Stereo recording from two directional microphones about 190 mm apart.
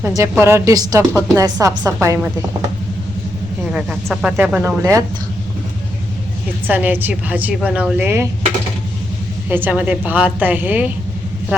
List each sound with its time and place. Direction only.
0.2 s a woman's voice: 15° right (ahead or behind)
3.7 s speech: 5° right (ahead or behind)
4.8 s speech: 20° right (ahead or behind)
6.7 s a woman's voice: 10° right (ahead or behind)
9.5 s a woman's voice: 10° right (ahead or behind)